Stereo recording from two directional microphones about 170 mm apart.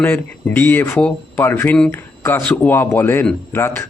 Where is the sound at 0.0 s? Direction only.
10° left (ahead or behind).